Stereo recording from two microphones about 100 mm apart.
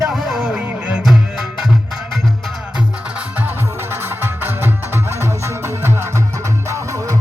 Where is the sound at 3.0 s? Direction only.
10° right (ahead or behind).